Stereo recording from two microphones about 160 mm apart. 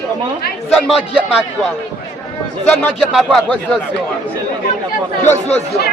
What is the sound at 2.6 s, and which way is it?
A man's voice, 5° left (ahead or behind).